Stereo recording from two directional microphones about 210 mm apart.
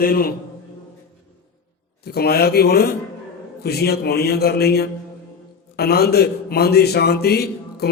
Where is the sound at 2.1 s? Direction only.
50° left (ahead or behind).